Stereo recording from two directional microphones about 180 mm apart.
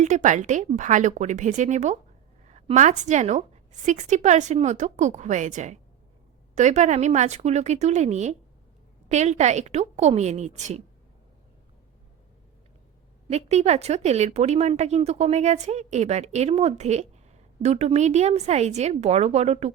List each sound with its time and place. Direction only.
0.0 s speech: 40° right (ahead or behind)
13.3 s speech: 35° right (ahead or behind)